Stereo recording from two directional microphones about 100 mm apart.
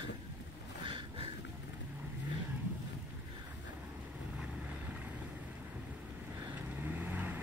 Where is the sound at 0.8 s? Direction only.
60° right (ahead or behind).